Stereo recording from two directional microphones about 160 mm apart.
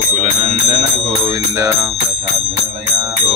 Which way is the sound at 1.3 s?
20° right (ahead or behind).